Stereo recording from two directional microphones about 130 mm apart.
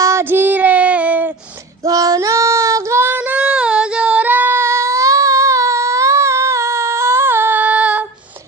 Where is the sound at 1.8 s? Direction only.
25° right (ahead or behind); by 8.1 s 10° right (ahead or behind).